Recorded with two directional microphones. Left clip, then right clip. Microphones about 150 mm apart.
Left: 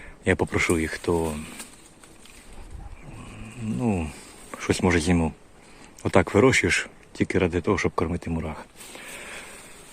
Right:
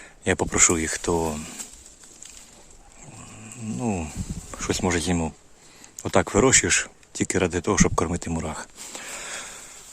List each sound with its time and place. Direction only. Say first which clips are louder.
0.3 s speech: right 1 dB; 25° right (ahead or behind)
3.7 s speech: left 1 dB; 20° right (ahead or behind)